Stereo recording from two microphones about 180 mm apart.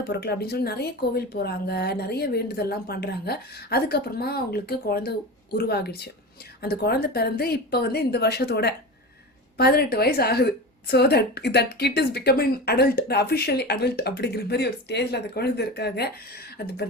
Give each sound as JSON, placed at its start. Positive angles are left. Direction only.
{"t": 0.1, "sound": "a woman's voice", "side_deg": 65}